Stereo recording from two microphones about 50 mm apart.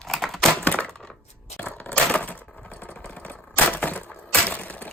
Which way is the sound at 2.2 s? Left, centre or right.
Left.